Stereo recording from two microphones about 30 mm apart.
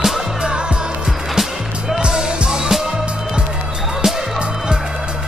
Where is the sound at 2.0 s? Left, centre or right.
Right.